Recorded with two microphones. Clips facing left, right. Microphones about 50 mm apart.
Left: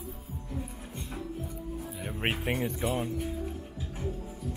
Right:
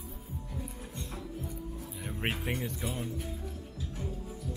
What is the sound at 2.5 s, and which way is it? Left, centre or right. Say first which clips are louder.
Speech: left 6 dB; left.